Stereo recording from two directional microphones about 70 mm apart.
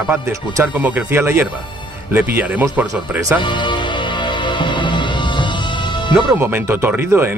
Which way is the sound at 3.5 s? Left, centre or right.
Left.